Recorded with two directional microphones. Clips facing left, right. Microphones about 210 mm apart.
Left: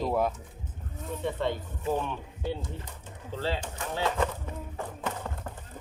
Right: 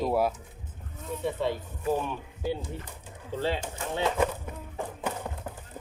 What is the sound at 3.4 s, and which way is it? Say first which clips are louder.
Speech: right 2 dB; 20° right (ahead or behind).